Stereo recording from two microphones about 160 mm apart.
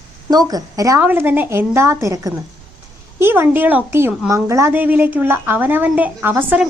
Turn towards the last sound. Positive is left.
turn(degrees=-10)  # may be behind; listen again after turning